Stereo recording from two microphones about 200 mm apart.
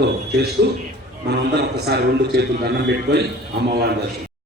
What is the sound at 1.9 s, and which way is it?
A man's voice, 55° right (ahead or behind).